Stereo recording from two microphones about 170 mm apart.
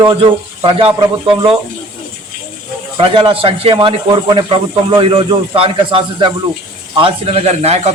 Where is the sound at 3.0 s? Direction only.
30° right (ahead or behind).